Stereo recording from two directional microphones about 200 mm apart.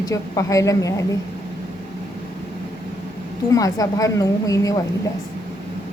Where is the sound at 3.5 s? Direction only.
15° left (ahead or behind).